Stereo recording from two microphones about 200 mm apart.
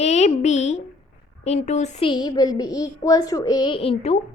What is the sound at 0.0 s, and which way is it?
A woman's voice, 35° left (ahead or behind).